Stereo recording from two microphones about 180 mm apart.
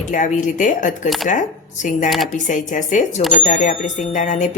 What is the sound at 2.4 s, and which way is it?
A woman's voice, 45° left (ahead or behind).